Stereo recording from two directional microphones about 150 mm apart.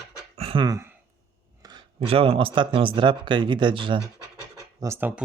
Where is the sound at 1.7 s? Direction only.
40° right (ahead or behind).